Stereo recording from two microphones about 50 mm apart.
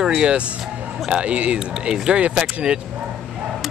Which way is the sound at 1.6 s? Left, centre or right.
Centre.